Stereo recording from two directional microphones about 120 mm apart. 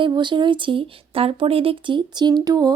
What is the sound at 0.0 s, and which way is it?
A woman's voice, 40° right (ahead or behind).